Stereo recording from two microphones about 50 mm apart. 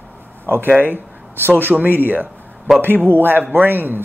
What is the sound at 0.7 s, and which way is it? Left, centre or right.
A man's voice, right.